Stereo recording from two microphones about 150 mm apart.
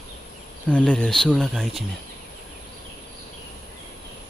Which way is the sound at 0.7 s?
5° left (ahead or behind).